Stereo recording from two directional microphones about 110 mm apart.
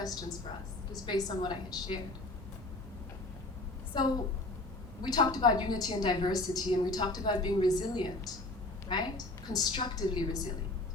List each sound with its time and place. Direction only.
0.0 s a woman's voice: 35° left (ahead or behind)
3.9 s a woman's voice: 40° left (ahead or behind)